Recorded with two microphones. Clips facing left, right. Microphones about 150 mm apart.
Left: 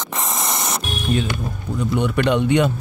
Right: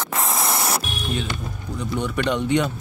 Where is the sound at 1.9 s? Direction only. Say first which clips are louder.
Left 4 dB; 65° left (ahead or behind).